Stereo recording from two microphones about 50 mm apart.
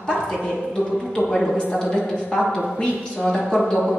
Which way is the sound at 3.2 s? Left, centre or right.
Centre.